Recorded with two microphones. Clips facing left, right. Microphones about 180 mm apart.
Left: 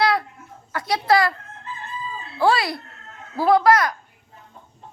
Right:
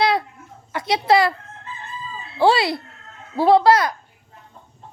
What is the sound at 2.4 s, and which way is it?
Speech, 25° right (ahead or behind).